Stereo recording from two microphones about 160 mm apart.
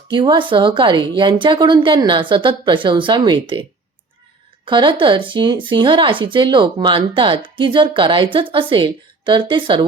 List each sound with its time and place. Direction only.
0.1 s a woman's voice: 30° right (ahead or behind)